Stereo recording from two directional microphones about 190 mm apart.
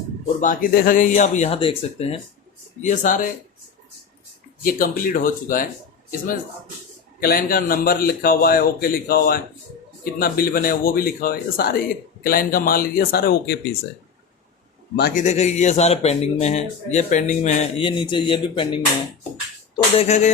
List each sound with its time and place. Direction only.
0.3 s a man's voice: 45° left (ahead or behind)
2.8 s a man's voice: 45° left (ahead or behind)
4.6 s a man's voice: 50° left (ahead or behind)
7.2 s a man's voice: 50° left (ahead or behind)
14.9 s a man's voice: 55° left (ahead or behind)
15.2 s a man's voice: 40° left (ahead or behind)